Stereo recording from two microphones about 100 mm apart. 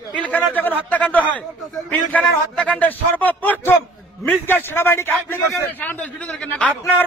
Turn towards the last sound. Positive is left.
turn(degrees=10)  # may be behind; listen again after turning